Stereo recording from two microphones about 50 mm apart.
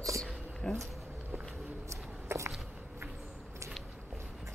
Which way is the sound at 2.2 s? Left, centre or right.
Right.